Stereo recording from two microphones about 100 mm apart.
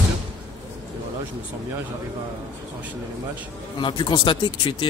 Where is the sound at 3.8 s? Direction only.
50° left (ahead or behind).